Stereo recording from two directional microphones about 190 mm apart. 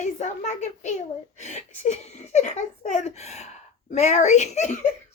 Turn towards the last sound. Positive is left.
turn(degrees=40)  # may be behind; listen again after turning